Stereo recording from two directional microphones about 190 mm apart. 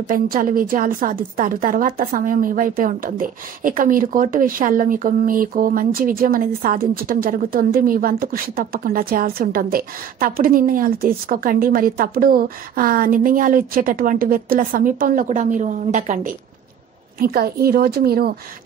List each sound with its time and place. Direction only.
0.1 s a woman's voice: 45° right (ahead or behind)
17.2 s a woman's voice: 50° right (ahead or behind)